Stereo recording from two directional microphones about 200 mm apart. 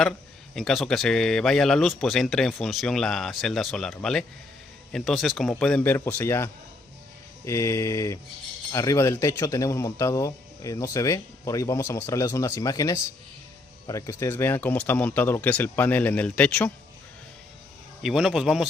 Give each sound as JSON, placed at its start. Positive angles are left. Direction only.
{"t": 0.6, "sound": "speech", "side_deg": 0}
{"t": 18.0, "sound": "speech", "side_deg": 0}